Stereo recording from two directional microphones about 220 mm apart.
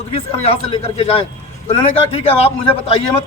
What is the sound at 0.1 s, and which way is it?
A man's voice, 25° left (ahead or behind).